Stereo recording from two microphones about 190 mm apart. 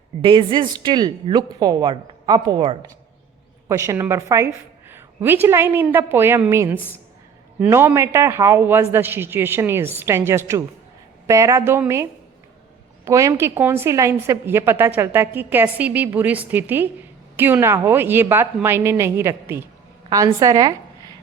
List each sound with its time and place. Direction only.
0.2 s a woman's voice: 25° right (ahead or behind)
13.1 s a woman's voice: 15° right (ahead or behind)